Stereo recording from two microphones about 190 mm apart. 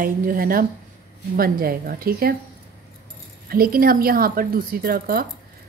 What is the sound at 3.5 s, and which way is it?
A woman's voice, 50° right (ahead or behind).